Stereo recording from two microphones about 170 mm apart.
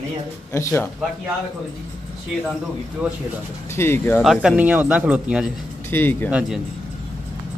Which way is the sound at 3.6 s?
15° left (ahead or behind).